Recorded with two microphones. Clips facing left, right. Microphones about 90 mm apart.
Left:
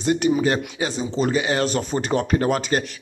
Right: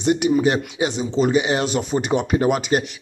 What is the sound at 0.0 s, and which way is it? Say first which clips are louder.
Speech: right 2 dB; 20° right (ahead or behind).